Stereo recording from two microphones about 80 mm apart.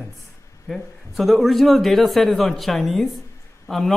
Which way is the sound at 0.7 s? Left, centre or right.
Centre.